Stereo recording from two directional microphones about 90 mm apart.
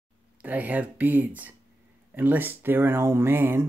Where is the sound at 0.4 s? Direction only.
15° right (ahead or behind).